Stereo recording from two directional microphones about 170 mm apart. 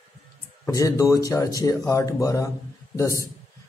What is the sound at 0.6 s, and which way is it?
A man's voice, 20° left (ahead or behind).